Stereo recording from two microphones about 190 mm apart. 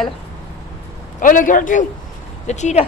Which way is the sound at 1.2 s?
45° left (ahead or behind).